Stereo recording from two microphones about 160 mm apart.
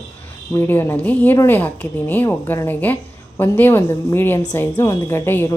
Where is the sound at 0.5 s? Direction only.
15° left (ahead or behind).